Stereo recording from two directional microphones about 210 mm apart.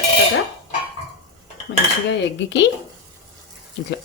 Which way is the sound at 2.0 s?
60° left (ahead or behind).